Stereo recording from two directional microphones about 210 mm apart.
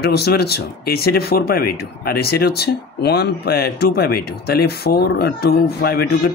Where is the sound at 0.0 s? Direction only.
50° left (ahead or behind).